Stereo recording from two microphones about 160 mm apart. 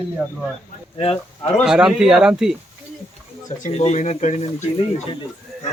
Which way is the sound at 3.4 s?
45° left (ahead or behind).